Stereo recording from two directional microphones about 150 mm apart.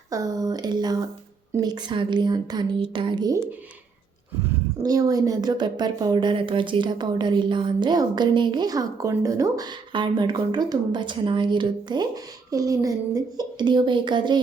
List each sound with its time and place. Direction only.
0.1 s a woman's voice: 25° right (ahead or behind)
4.8 s a woman's voice: 25° right (ahead or behind)